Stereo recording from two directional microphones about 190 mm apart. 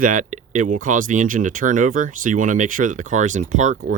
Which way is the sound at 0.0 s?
45° right (ahead or behind).